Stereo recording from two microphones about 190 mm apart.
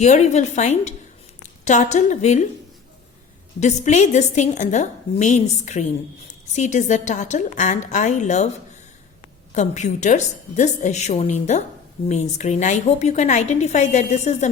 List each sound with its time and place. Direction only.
0.0 s a woman's voice: 35° left (ahead or behind)
3.6 s a woman's voice: 40° left (ahead or behind)
9.6 s a woman's voice: 40° left (ahead or behind)